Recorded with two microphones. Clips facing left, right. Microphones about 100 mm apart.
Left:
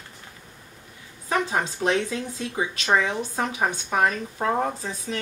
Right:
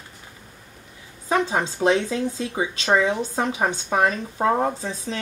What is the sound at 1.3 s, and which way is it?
Speech, 20° right (ahead or behind).